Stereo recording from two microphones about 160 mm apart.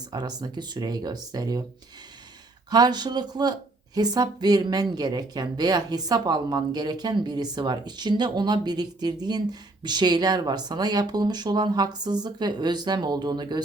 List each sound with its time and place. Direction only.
0.1 s speech: 25° right (ahead or behind)
2.6 s speech: 25° right (ahead or behind)